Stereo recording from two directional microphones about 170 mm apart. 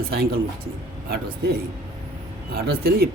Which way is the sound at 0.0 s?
60° right (ahead or behind).